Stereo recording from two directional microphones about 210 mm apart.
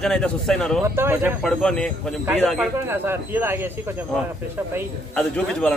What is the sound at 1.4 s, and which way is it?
A man's voice, 5° left (ahead or behind).